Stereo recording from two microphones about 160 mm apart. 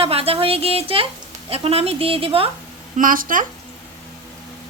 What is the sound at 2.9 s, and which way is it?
Speech, 60° right (ahead or behind).